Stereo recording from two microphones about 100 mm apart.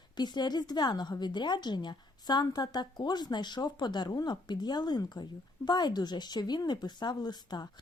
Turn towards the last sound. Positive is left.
turn(degrees=45)  # may be behind; listen again after turning